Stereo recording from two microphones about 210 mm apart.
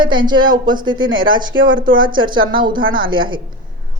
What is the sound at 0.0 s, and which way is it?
A woman's voice, 20° right (ahead or behind).